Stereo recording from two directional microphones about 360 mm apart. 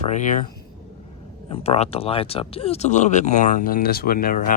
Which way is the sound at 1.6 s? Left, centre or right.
Centre.